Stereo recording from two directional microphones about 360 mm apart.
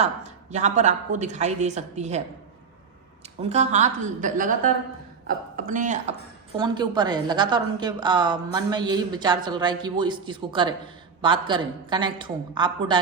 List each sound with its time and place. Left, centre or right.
0.0 s a woman's voice: centre
3.4 s a woman's voice: centre
5.5 s a woman's voice: right